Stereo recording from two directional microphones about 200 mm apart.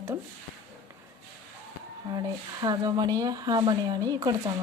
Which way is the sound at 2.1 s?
20° right (ahead or behind).